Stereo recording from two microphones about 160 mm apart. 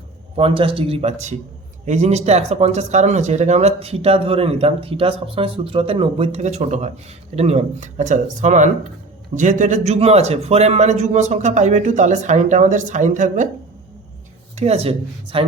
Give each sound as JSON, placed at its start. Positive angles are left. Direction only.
{"t": 0.3, "sound": "a man's voice", "side_deg": -35}
{"t": 14.5, "sound": "speech", "side_deg": -40}